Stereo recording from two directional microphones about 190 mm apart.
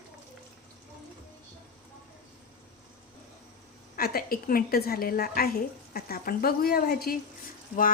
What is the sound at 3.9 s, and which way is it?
A woman's voice, 50° left (ahead or behind).